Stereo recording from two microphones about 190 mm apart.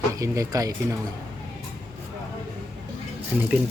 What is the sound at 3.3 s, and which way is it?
Speech, 5° right (ahead or behind).